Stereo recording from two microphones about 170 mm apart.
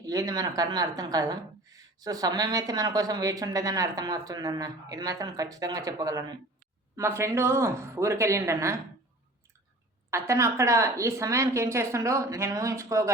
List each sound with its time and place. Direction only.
0.0 s speech: 20° right (ahead or behind)
10.1 s speech: 15° right (ahead or behind)